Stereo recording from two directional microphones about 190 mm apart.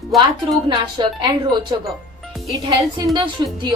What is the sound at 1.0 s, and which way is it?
Speech, 20° right (ahead or behind).